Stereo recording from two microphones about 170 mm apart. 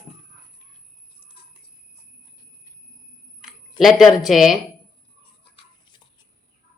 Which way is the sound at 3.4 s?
Centre (ahead or behind).